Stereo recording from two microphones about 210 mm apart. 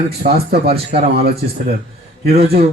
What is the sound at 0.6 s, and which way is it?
Speech, 30° right (ahead or behind).